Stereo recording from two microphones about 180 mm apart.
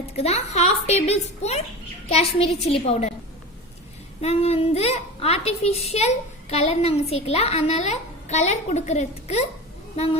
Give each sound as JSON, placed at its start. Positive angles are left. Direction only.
{"t": 0.2, "sound": "a woman's voice", "side_deg": 35}
{"t": 4.2, "sound": "a woman's voice", "side_deg": 35}